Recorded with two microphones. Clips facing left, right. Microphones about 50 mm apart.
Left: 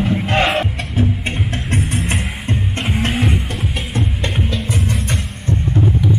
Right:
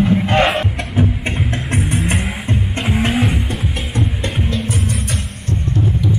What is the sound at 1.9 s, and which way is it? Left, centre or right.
Music, centre.